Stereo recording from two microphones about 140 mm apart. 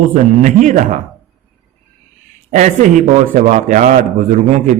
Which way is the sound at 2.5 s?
60° right (ahead or behind).